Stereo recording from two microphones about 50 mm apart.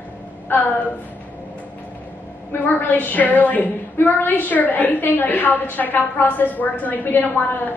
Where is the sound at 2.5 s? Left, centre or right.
Left.